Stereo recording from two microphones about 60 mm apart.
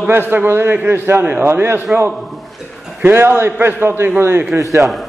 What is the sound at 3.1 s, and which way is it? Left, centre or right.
A man's voice, right.